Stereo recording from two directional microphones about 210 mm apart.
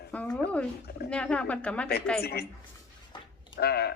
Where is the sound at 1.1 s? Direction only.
5° left (ahead or behind).